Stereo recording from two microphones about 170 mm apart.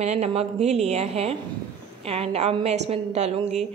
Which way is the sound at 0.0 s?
40° right (ahead or behind).